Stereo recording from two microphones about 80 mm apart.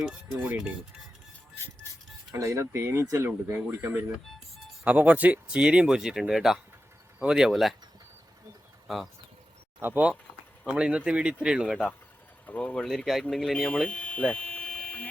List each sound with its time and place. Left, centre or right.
0.1 s speech: centre
2.3 s speech: right
3.2 s speech: right; by 7.8 s centre
9.8 s speech: centre
12.5 s speech: centre
12.8 s speech: centre
13.8 s hum: centre